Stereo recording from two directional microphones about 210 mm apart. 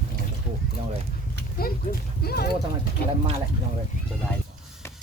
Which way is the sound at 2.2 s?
50° left (ahead or behind).